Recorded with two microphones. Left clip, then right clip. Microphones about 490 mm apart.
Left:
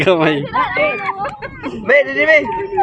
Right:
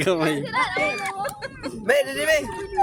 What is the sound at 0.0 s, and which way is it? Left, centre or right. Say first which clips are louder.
Speech: left 9 dB; right.